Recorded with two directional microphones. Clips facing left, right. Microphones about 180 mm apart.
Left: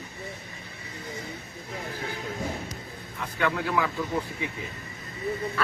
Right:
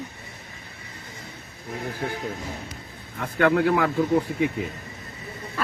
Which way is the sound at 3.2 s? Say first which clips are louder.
Right 8 dB; 60° right (ahead or behind).